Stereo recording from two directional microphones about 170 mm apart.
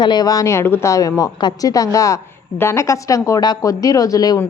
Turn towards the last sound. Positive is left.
turn(degrees=20)  # may be behind; listen again after turning